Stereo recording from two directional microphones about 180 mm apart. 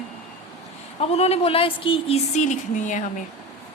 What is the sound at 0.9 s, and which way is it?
A woman's voice, 35° left (ahead or behind).